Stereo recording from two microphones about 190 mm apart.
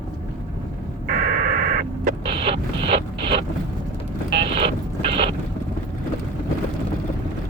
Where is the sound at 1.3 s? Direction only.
50° right (ahead or behind).